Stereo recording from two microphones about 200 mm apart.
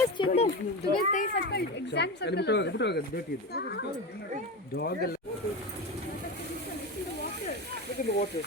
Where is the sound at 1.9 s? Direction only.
55° left (ahead or behind).